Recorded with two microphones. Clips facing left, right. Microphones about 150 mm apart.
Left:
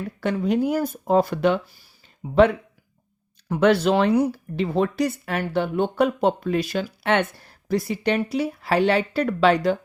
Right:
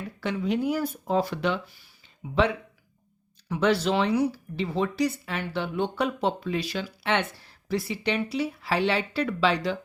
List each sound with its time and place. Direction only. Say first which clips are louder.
0.2 s speech: left 5 dB; 45° left (ahead or behind)